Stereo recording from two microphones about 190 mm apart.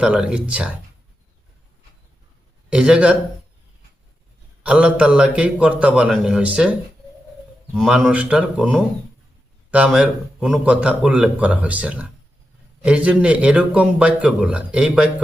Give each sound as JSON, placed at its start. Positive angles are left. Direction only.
{"t": 0.0, "sound": "a man's voice", "side_deg": -5}
{"t": 2.7, "sound": "a man's voice", "side_deg": -5}
{"t": 4.6, "sound": "a man's voice", "side_deg": -5}
{"t": 7.8, "sound": "a man's voice", "side_deg": -5}